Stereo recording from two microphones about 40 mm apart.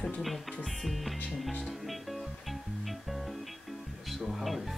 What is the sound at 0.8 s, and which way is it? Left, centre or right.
Speech, centre.